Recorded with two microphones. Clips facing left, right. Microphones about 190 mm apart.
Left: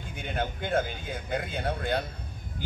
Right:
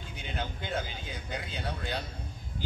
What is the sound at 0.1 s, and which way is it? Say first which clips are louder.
A man's voice: left 5 dB; 55° left (ahead or behind).